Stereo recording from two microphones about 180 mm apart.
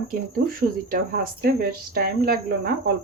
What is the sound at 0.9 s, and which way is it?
Speech, 55° right (ahead or behind).